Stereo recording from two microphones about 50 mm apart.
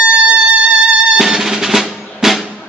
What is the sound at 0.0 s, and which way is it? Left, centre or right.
Music, right.